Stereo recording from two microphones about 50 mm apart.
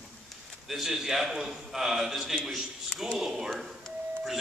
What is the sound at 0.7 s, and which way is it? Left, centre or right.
A man's voice, centre.